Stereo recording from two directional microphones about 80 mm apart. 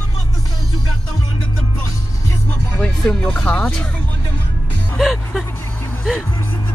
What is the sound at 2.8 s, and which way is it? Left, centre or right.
Speech, centre.